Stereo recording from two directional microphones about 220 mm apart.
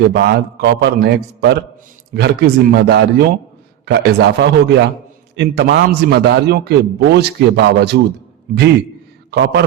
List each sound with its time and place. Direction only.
0.1 s a man's voice: 45° right (ahead or behind)
8.5 s a man's voice: 35° right (ahead or behind)
9.3 s a man's voice: 50° right (ahead or behind)